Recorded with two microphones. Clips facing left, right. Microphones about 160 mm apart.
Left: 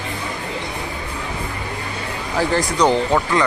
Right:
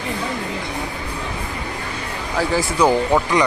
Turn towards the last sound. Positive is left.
turn(degrees=-15)  # may be behind; listen again after turning